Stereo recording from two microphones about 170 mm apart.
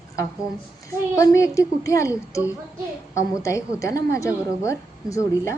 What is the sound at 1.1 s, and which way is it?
A woman's voice, 20° left (ahead or behind).